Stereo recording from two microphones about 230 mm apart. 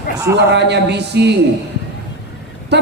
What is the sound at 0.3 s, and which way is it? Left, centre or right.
A man's voice, right.